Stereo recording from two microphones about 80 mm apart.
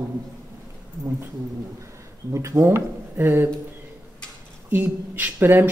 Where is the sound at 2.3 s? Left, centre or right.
Right.